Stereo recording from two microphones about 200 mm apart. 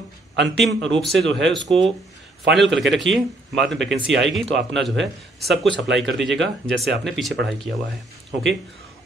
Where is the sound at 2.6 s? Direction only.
65° right (ahead or behind).